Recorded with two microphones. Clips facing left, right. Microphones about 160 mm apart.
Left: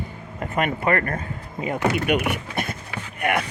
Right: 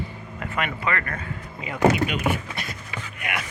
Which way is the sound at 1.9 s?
60° left (ahead or behind).